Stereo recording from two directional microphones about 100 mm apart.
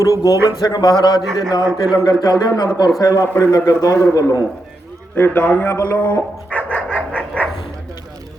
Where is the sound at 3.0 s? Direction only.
30° left (ahead or behind).